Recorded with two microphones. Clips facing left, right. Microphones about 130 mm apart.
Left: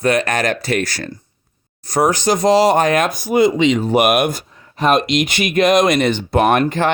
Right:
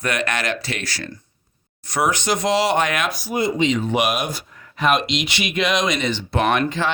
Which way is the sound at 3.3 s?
90° left.